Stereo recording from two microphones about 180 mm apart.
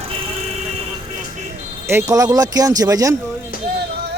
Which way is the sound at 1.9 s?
15° right (ahead or behind).